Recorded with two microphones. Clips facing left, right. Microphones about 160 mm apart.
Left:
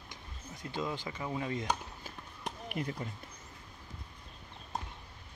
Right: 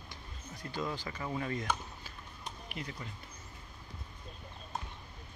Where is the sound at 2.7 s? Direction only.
45° left (ahead or behind).